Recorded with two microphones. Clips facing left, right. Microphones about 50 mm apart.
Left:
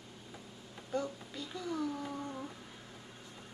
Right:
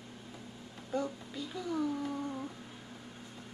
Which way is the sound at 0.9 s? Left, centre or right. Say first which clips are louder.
Right 1 dB; centre.